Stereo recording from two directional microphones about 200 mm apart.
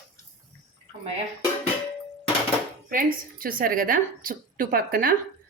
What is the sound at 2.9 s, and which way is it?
A woman's voice, 45° right (ahead or behind).